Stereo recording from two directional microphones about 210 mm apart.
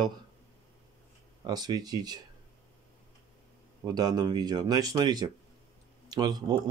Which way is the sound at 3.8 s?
20° right (ahead or behind).